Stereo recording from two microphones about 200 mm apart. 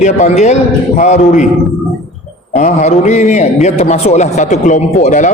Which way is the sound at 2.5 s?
35° left (ahead or behind).